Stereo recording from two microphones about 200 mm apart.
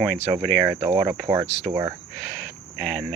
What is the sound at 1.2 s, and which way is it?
Cricket, 15° right (ahead or behind).